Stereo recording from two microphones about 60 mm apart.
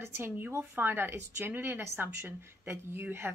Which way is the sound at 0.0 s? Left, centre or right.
Right.